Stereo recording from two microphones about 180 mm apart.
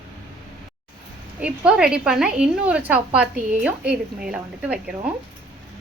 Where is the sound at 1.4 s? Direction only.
5° right (ahead or behind).